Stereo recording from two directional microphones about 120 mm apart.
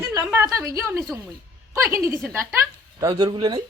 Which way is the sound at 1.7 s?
20° right (ahead or behind).